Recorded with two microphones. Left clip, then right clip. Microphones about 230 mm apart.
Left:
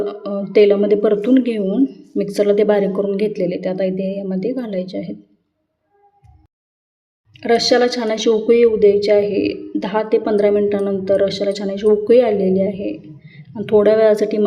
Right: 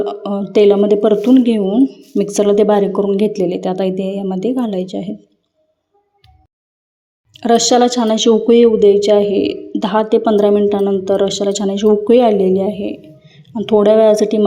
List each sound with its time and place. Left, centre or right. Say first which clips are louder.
0.0 s speech: right 3 dB; right
7.3 s speech: right 3 dB; right